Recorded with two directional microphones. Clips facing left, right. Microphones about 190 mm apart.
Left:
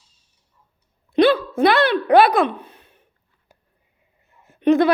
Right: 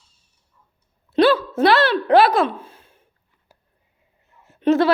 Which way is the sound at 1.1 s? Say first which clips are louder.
Even; 15° left (ahead or behind).